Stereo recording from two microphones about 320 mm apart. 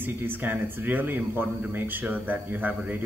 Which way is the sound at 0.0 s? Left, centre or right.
Centre.